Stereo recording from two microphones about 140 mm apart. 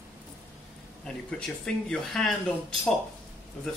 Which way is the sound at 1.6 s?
5° left (ahead or behind).